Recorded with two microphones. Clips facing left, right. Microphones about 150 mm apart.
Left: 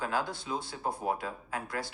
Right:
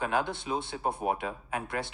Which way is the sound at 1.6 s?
25° right (ahead or behind).